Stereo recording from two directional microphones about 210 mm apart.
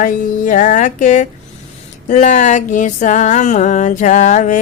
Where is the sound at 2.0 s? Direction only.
35° left (ahead or behind).